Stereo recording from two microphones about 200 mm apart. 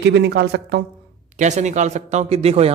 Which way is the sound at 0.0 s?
55° right (ahead or behind).